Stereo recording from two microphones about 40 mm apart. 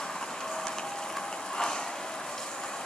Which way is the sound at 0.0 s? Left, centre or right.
Centre.